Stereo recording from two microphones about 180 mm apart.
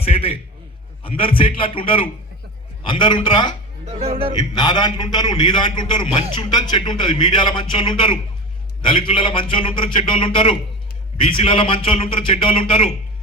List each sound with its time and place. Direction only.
0.0 s a sound: 30° left (ahead or behind)
1.0 s speech: 30° left (ahead or behind)
3.8 s speech: 35° right (ahead or behind)
4.4 s speech: 25° left (ahead or behind)